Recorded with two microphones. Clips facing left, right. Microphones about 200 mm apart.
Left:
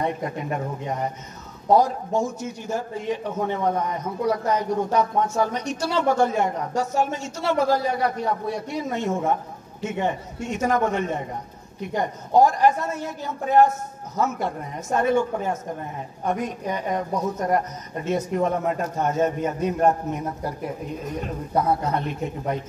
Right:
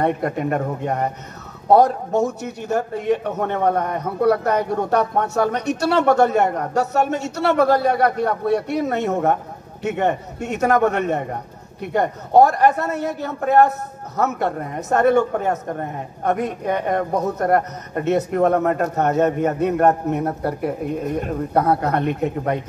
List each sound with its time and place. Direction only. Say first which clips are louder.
0.0 s a man's voice: right 6 dB; 65° right (ahead or behind)
21.5 s a man's voice: right 4 dB; 65° right (ahead or behind)